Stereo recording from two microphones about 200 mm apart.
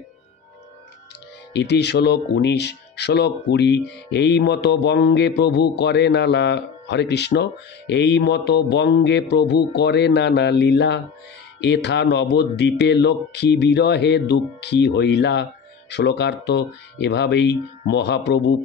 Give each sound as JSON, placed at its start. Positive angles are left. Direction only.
{"t": 1.5, "sound": "speech", "side_deg": 60}